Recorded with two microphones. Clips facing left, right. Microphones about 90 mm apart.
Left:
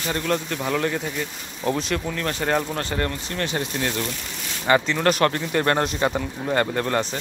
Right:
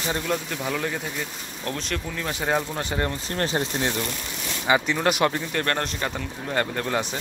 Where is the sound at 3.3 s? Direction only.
35° right (ahead or behind).